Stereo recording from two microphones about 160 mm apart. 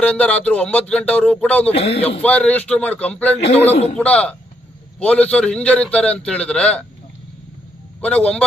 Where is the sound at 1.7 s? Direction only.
40° left (ahead or behind).